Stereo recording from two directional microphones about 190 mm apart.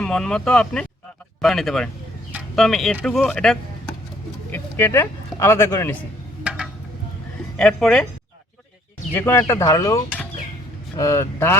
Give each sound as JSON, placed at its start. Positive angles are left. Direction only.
{"t": 0.0, "sound": "speech", "side_deg": 5}
{"t": 6.4, "sound": "a sound", "side_deg": -5}
{"t": 7.5, "sound": "speech", "side_deg": 5}
{"t": 9.1, "sound": "speech", "side_deg": 15}